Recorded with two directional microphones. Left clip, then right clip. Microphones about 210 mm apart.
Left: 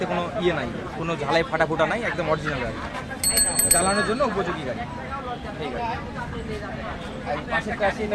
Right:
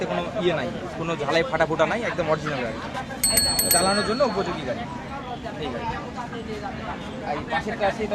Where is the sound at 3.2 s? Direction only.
25° right (ahead or behind).